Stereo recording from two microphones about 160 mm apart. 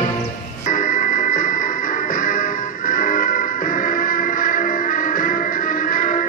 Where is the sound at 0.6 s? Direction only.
55° left (ahead or behind).